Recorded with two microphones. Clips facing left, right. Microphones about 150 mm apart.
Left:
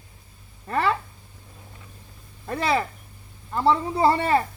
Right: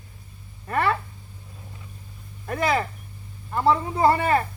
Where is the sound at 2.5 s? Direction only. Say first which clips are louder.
Even; 30° left (ahead or behind).